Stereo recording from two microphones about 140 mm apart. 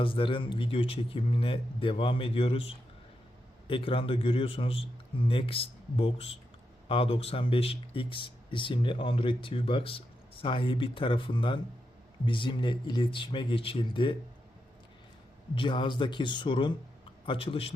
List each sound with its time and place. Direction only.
0.0 s speech: 40° left (ahead or behind)
15.5 s speech: 35° left (ahead or behind)